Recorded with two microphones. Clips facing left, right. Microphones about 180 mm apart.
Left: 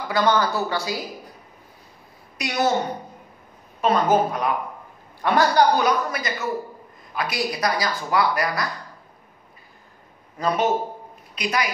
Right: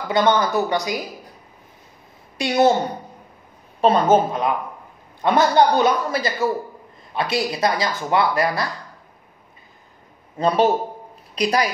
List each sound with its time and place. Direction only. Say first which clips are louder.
0.1 s speech: right 3 dB; 20° right (ahead or behind)
2.3 s a woman's voice: right 6 dB; 30° right (ahead or behind)
3.8 s speech: right 3 dB; 25° right (ahead or behind)
10.3 s a woman's voice: right 4 dB; 30° right (ahead or behind)